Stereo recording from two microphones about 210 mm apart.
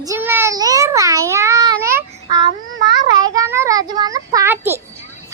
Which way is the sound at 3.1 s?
20° right (ahead or behind).